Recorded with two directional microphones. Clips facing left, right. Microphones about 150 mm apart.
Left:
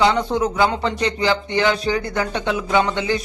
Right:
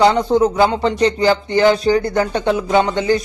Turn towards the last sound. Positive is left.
turn(degrees=-40)  # may be behind; listen again after turning